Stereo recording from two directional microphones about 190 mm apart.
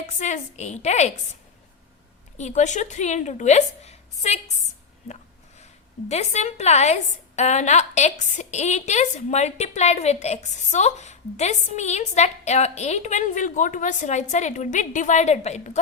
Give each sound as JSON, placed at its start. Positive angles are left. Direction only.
{"t": 0.2, "sound": "a woman's voice", "side_deg": 40}
{"t": 2.4, "sound": "a woman's voice", "side_deg": 40}
{"t": 6.1, "sound": "a woman's voice", "side_deg": 35}